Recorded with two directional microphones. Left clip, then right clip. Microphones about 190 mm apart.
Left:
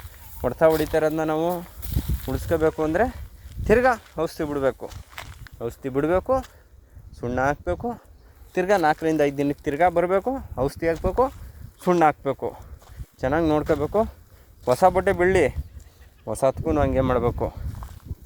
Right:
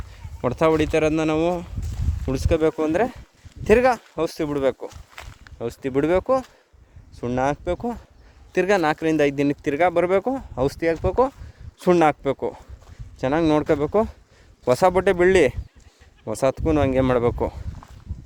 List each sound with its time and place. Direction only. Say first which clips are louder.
0.4 s speech: even; 20° right (ahead or behind)
4.9 s a sound: left 1 dB; 45° left (ahead or behind)
5.5 s speech: right 2 dB; 25° right (ahead or behind)
14.6 s speech: right 1 dB; 45° right (ahead or behind)